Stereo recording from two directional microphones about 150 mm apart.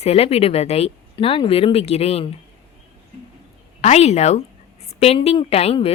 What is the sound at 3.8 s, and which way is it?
A woman's voice, 45° left (ahead or behind).